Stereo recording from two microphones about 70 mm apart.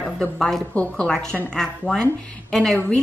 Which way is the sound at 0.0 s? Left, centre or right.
Centre.